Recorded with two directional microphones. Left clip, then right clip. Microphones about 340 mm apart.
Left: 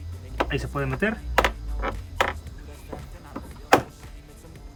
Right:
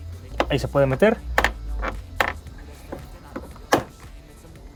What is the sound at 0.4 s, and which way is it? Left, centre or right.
Speech, centre.